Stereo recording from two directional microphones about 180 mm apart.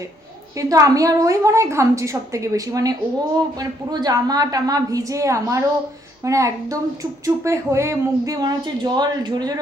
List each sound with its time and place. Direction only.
0.5 s a woman's voice: 20° right (ahead or behind)